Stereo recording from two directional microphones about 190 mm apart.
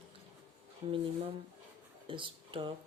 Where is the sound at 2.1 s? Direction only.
25° right (ahead or behind).